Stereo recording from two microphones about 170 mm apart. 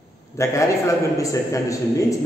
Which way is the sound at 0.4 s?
15° left (ahead or behind).